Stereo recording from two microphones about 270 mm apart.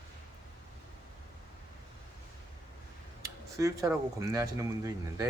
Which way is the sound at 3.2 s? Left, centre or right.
Centre.